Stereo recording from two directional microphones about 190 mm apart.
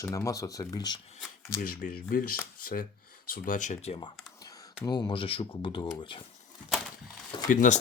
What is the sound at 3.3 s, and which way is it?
Speech, 45° left (ahead or behind).